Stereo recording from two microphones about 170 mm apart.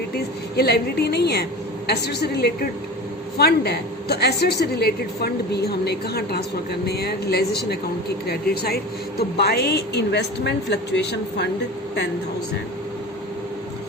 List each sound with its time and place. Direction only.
0.5 s a woman's voice: 70° left (ahead or behind); by 11.4 s 90° left